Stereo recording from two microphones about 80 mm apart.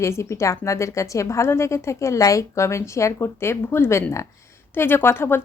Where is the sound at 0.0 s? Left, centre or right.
Left.